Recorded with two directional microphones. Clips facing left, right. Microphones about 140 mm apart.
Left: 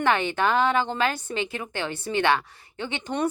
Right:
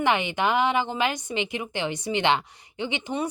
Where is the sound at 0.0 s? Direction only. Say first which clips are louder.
Left 1 dB; 15° right (ahead or behind).